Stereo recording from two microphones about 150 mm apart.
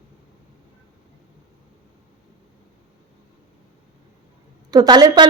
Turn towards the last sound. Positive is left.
turn(degrees=-25)  # may be behind; listen again after turning